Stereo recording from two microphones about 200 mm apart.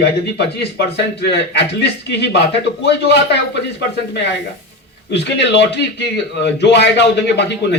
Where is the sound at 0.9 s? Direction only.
55° left (ahead or behind).